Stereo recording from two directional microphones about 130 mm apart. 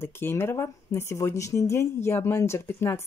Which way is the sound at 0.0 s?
20° left (ahead or behind).